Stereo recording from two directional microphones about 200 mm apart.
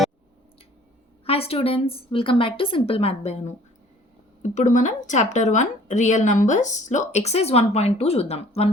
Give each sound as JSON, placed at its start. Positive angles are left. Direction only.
{"t": 1.2, "sound": "a woman's voice", "side_deg": 30}